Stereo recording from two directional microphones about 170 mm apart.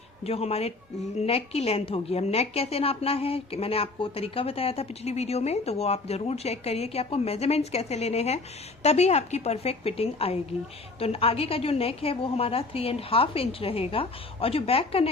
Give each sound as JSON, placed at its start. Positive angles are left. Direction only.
{"t": 0.3, "sound": "a woman's voice", "side_deg": 35}